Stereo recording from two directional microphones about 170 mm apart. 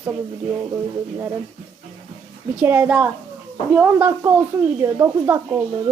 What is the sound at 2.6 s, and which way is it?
Speech, 10° right (ahead or behind).